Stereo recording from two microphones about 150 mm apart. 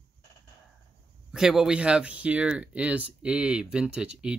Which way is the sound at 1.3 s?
5° right (ahead or behind).